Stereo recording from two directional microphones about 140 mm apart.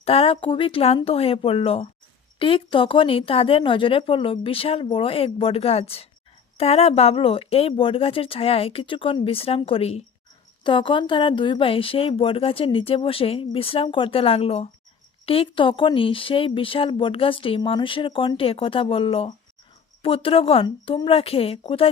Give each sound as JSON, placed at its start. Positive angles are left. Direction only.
{"t": 0.0, "sound": "speech", "side_deg": 45}